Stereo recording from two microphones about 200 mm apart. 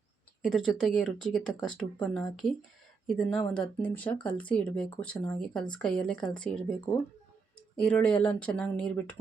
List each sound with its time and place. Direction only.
0.4 s speech: centre (ahead or behind)
7.8 s speech: 5° left (ahead or behind)